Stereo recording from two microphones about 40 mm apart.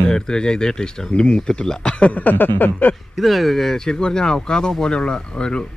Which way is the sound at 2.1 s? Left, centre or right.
Left.